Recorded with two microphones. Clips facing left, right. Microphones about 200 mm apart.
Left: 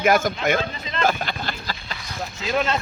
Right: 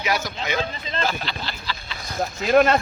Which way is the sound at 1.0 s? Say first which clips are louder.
Left 5 dB; 50° left (ahead or behind).